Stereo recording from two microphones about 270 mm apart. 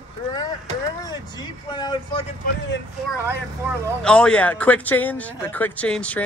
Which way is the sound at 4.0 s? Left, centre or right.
Centre.